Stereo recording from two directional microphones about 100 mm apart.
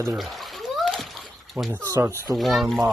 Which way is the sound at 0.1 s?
Centre (ahead or behind).